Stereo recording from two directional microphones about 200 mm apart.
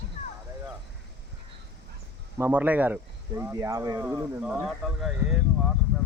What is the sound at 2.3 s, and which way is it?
Speech, 10° right (ahead or behind).